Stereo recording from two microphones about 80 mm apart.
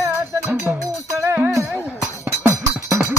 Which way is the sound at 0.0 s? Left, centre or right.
Right.